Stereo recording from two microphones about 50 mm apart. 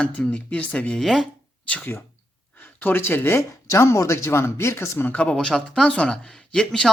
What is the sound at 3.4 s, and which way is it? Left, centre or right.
Speech, left.